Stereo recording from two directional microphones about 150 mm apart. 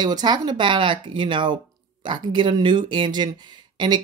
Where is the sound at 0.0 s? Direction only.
30° right (ahead or behind).